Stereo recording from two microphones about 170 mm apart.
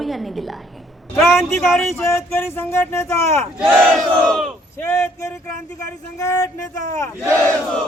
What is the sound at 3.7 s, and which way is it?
Speech, centre (ahead or behind).